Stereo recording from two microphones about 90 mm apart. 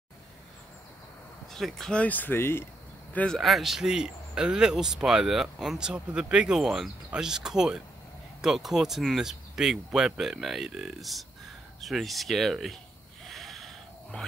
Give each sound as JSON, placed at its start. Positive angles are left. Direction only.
{"t": 1.5, "sound": "speech", "side_deg": 5}
{"t": 3.1, "sound": "a man's voice", "side_deg": 15}
{"t": 3.3, "sound": "speech", "side_deg": 0}
{"t": 13.2, "sound": "a sound", "side_deg": 0}